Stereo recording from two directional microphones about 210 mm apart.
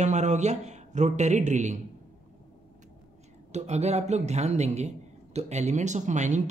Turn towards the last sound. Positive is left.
turn(degrees=-35)  # may be behind; listen again after turning